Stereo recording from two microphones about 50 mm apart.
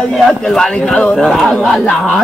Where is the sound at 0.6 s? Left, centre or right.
Centre.